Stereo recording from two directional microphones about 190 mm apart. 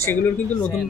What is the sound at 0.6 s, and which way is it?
Speech, centre (ahead or behind).